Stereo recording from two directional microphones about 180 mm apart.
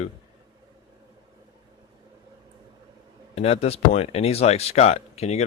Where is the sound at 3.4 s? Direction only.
35° left (ahead or behind).